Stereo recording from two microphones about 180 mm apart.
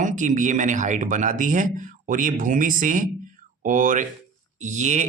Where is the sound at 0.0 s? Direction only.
45° right (ahead or behind).